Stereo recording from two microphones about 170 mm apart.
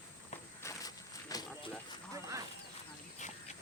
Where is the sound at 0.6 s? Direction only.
20° left (ahead or behind).